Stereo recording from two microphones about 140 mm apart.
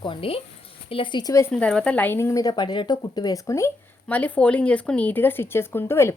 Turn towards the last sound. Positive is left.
turn(degrees=15)  # may be behind; listen again after turning